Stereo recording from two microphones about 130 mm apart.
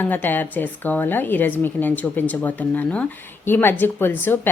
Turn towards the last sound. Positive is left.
turn(degrees=15)  # may be behind; listen again after turning